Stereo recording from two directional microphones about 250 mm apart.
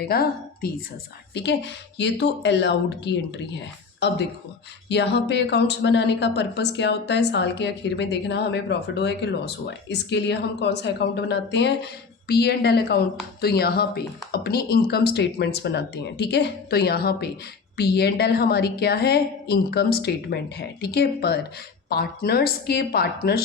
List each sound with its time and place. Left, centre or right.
0.1 s a woman's voice: left